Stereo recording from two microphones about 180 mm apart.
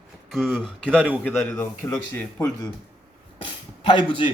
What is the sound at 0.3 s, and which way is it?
Speech, centre (ahead or behind).